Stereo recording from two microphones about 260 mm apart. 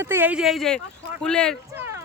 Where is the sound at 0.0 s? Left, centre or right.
Centre.